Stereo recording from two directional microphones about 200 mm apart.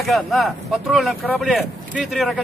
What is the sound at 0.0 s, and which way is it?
Speech, centre (ahead or behind).